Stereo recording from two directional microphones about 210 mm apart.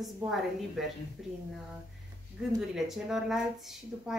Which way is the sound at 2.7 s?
Centre (ahead or behind).